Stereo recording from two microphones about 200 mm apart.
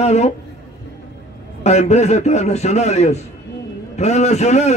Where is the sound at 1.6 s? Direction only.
35° left (ahead or behind).